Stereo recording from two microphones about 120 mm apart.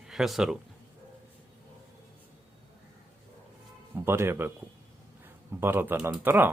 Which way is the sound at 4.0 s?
20° right (ahead or behind).